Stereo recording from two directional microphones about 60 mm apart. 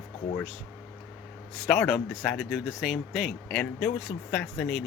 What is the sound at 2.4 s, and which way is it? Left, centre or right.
Speech, centre.